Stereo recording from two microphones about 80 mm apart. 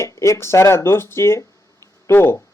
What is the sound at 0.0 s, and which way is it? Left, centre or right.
Speech, left.